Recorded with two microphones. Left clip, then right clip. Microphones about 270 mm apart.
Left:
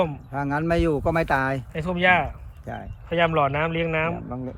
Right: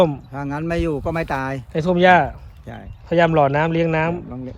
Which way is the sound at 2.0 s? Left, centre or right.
Centre.